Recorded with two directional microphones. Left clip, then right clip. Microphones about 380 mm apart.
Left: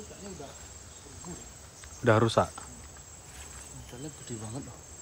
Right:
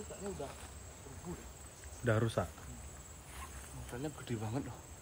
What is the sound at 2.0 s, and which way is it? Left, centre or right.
Speech, centre.